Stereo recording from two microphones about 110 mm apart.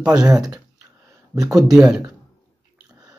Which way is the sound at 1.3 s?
30° right (ahead or behind).